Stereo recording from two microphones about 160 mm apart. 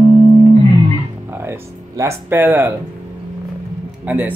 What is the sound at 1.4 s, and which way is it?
Music, 15° right (ahead or behind).